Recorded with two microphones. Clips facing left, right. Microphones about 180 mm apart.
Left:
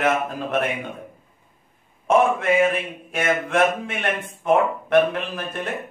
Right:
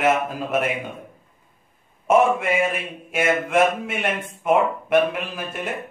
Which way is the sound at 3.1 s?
10° right (ahead or behind).